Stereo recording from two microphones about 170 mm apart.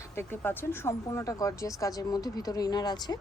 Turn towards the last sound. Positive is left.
turn(degrees=25)  # may be behind; listen again after turning